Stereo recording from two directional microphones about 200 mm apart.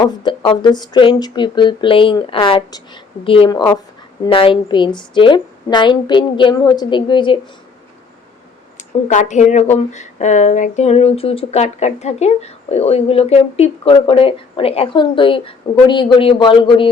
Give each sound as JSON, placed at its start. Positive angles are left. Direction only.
{"t": 0.0, "sound": "speech", "side_deg": 20}
{"t": 8.8, "sound": "speech", "side_deg": 35}